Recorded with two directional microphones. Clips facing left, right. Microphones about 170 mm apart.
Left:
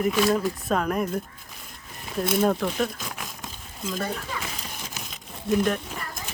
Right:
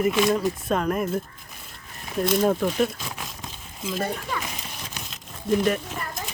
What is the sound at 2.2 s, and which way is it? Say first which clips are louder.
Speech: right 1 dB; 5° left (ahead or behind).